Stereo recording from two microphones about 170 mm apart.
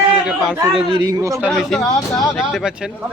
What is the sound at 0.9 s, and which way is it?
Speech, 20° right (ahead or behind).